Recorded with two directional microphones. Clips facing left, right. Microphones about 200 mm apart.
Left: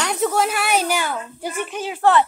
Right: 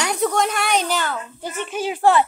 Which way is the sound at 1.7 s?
10° right (ahead or behind).